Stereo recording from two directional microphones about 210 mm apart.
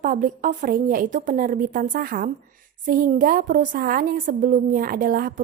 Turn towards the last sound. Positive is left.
turn(degrees=-40)  # may be behind; listen again after turning